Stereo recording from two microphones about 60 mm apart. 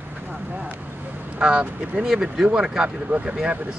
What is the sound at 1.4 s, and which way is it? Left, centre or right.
Speech, centre.